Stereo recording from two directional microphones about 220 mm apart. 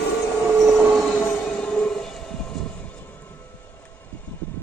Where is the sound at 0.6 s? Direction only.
Centre (ahead or behind).